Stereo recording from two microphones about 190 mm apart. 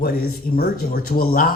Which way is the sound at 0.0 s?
55° left (ahead or behind).